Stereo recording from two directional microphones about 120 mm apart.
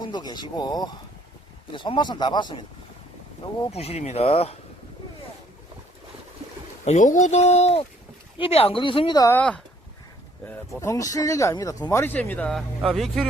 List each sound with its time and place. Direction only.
0.0 s speech: 35° left (ahead or behind)
3.7 s speech: 60° left (ahead or behind)
6.8 s speech: 90° left; by 9.1 s 45° left (ahead or behind)
9.3 s speech: 10° left (ahead or behind)
10.8 s speech: 25° left (ahead or behind); by 13.2 s centre (ahead or behind)